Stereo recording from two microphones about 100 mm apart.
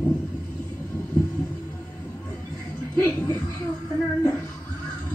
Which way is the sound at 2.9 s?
15° left (ahead or behind).